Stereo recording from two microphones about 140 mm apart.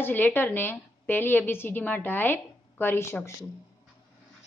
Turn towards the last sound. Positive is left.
turn(degrees=15)  # may be behind; listen again after turning